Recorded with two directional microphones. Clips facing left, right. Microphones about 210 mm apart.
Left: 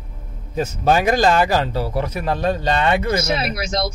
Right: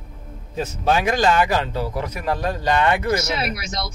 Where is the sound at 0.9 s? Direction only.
40° left (ahead or behind).